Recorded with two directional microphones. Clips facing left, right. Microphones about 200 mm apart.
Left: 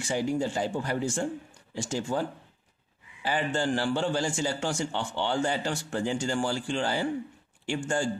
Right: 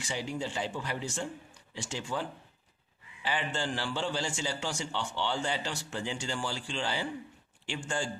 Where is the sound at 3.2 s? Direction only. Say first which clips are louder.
Left 6 dB; 45° left (ahead or behind).